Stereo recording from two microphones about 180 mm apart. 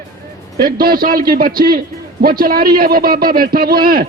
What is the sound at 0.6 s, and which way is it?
A man's voice, 55° right (ahead or behind).